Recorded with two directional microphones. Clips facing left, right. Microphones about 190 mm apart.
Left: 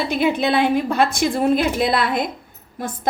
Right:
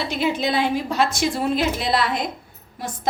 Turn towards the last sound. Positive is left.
turn(degrees=50)  # may be behind; listen again after turning